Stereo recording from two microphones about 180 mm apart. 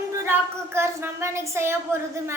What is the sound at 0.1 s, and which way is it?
Speech, 15° right (ahead or behind).